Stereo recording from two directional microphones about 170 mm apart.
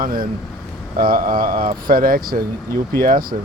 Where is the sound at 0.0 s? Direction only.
55° right (ahead or behind).